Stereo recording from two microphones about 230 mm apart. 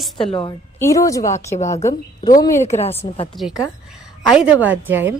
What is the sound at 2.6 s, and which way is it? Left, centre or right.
Speech, left.